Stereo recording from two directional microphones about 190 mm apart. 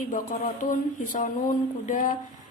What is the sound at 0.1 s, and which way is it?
A woman's voice, 45° left (ahead or behind).